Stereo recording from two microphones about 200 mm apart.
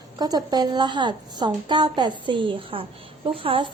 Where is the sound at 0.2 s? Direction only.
20° right (ahead or behind).